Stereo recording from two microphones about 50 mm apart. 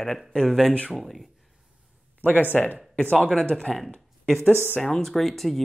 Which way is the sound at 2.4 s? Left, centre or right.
Left.